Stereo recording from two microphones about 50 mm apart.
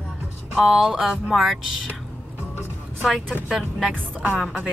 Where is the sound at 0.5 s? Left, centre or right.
Centre.